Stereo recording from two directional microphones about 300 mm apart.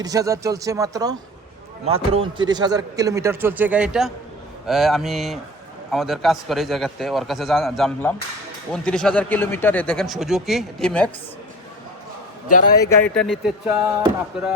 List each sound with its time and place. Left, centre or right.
0.0 s speech: centre
12.5 s a man's voice: left
12.7 s speech: centre
13.2 s speech: centre